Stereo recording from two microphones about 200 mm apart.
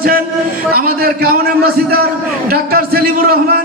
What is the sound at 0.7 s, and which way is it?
Speech, 45° right (ahead or behind).